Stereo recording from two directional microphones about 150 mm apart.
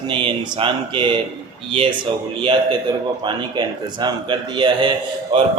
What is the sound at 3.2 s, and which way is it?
Speech, 30° right (ahead or behind).